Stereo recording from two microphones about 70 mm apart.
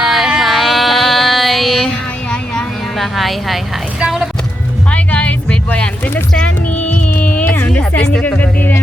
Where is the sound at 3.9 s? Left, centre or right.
Centre.